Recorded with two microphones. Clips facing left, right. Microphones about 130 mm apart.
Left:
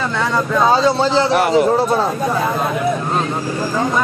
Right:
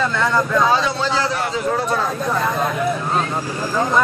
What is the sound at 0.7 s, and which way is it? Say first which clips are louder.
Speech: left 5 dB; 30° left (ahead or behind).